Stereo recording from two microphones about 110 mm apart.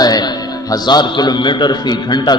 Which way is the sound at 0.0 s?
35° left (ahead or behind).